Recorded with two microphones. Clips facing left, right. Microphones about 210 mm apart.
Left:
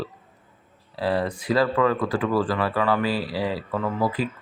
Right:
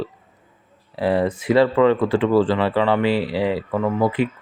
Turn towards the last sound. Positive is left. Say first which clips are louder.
# right 5 dB
turn(degrees=-20)  # may be behind; listen again after turning